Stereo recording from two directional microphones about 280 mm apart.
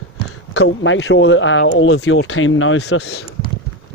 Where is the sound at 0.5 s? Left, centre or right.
Left.